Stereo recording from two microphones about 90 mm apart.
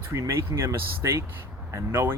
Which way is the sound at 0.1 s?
30° right (ahead or behind).